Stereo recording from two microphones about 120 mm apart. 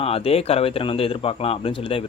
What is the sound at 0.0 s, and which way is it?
A man's voice, 55° left (ahead or behind).